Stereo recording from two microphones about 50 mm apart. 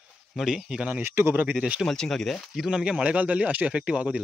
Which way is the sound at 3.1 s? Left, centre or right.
Right.